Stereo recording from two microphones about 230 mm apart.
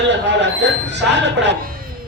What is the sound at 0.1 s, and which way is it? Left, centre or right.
Speech, right.